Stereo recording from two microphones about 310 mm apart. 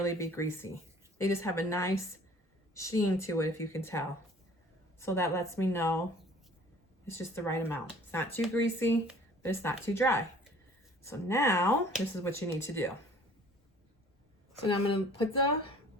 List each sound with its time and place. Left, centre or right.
0.0 s speech: centre
7.2 s speech: centre
14.9 s speech: centre